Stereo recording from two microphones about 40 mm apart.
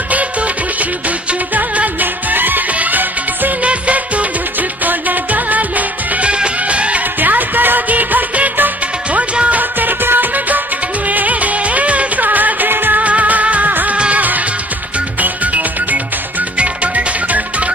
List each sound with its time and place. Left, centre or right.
1.5 s music: right
3.6 s music of bollywood: right
6.2 s music: right
7.2 s music: right
13.0 s music: right